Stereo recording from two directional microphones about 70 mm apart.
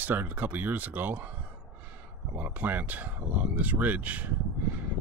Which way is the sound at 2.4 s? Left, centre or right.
Right.